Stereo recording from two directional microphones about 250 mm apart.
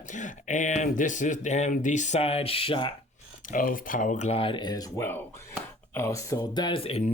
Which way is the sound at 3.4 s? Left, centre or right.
Left.